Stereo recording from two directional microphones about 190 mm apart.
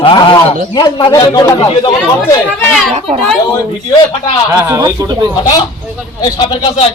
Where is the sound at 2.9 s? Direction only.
30° right (ahead or behind).